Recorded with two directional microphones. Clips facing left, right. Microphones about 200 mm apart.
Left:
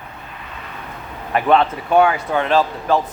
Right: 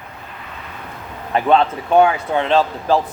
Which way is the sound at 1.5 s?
25° right (ahead or behind).